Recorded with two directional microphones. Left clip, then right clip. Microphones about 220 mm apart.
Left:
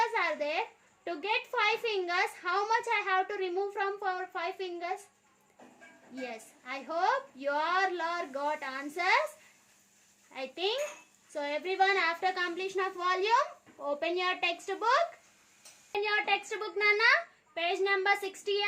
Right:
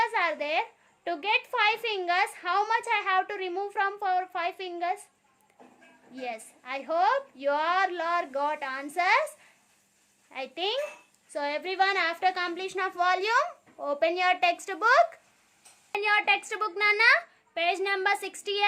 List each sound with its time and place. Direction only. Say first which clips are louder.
0.0 s a sound: right 3 dB; 35° right (ahead or behind)
1.0 s a woman's voice: right 5 dB; 35° right (ahead or behind)
6.1 s a woman's voice: right 5 dB; 35° right (ahead or behind)
10.3 s a woman's voice: right 3 dB; 40° right (ahead or behind)